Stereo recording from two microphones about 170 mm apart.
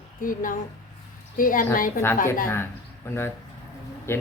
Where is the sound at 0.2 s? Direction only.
50° left (ahead or behind).